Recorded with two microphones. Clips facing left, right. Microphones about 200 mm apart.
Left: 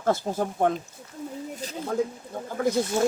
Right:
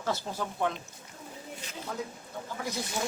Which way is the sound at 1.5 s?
40° left (ahead or behind).